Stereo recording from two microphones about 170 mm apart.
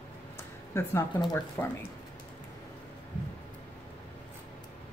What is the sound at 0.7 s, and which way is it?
A woman's voice, 15° left (ahead or behind).